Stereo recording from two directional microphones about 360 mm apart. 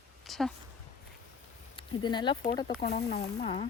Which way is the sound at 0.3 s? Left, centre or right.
Centre.